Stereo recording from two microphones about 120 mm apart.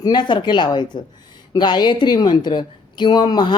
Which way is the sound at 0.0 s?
35° left (ahead or behind).